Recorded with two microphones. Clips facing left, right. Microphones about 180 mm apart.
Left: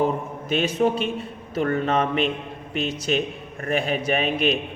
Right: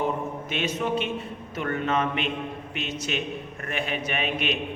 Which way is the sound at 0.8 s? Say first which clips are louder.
Left 5 dB; 40° left (ahead or behind).